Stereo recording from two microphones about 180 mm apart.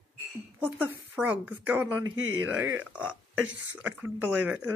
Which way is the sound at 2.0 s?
90° right.